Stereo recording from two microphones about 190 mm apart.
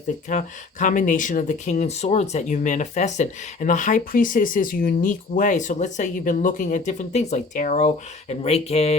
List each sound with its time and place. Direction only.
0.3 s speech: 40° left (ahead or behind)